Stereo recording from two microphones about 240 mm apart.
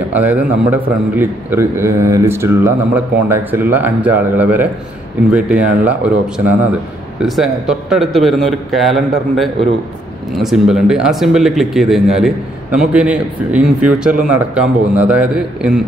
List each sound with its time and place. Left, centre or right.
0.1 s a man's voice: centre
10.3 s speech: centre